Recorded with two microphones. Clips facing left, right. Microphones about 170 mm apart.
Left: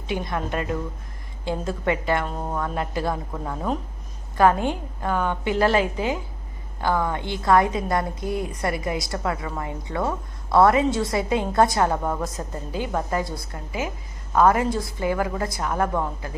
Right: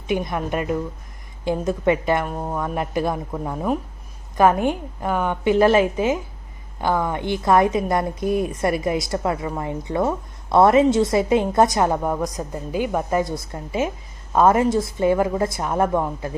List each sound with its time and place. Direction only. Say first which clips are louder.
0.1 s a woman's voice: right 4 dB; 20° right (ahead or behind)